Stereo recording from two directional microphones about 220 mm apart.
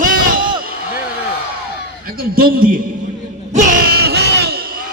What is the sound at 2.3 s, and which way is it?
Speech, 40° right (ahead or behind).